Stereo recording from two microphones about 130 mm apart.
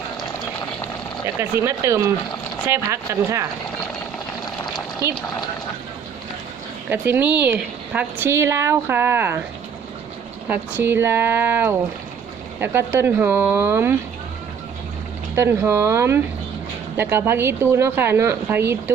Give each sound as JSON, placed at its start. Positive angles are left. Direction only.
{"t": 1.4, "sound": "speech", "side_deg": -20}
{"t": 6.9, "sound": "a woman's voice", "side_deg": -15}
{"t": 10.5, "sound": "a woman's voice", "side_deg": -15}
{"t": 15.4, "sound": "speech", "side_deg": -20}